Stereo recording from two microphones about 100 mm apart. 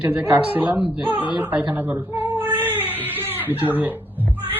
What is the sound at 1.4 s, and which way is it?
Cat, 15° right (ahead or behind).